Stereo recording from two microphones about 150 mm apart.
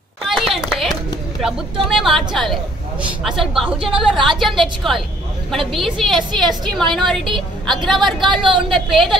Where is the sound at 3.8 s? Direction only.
35° right (ahead or behind).